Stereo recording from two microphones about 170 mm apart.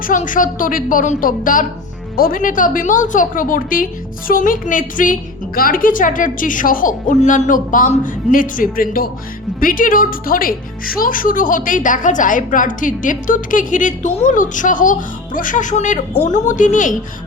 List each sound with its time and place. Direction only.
0.0 s a woman's voice: 50° left (ahead or behind)